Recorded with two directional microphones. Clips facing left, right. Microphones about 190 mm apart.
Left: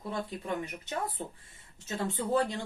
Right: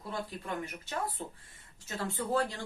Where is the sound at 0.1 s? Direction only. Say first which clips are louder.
Left 3 dB; 20° left (ahead or behind).